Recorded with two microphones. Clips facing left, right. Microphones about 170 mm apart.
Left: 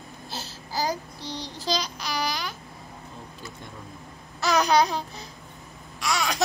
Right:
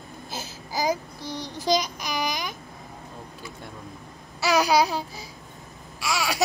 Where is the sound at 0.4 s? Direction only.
15° right (ahead or behind).